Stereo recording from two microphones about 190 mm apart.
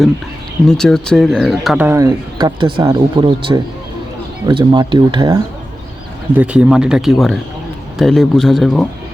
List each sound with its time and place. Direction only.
0.7 s speech: 5° left (ahead or behind); by 5.4 s 25° right (ahead or behind)
6.3 s speech: 5° right (ahead or behind)